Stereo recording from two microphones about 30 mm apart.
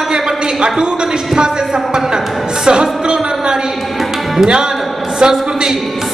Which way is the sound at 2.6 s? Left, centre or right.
Right.